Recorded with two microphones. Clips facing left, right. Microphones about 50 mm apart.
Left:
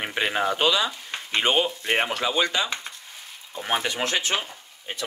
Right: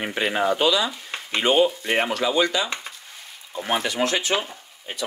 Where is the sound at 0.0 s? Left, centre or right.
Left.